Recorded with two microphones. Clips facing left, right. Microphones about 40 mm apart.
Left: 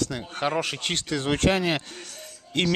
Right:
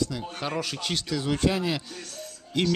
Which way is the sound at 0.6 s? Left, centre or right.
Left.